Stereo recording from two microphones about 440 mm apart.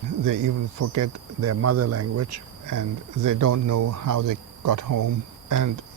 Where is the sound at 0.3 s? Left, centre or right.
Right.